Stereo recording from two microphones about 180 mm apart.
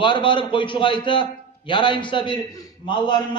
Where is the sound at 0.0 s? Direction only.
25° left (ahead or behind).